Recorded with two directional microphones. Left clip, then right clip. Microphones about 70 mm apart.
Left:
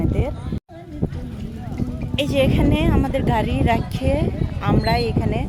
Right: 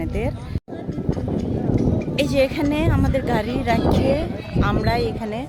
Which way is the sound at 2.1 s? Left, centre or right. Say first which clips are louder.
Left 1 dB; centre.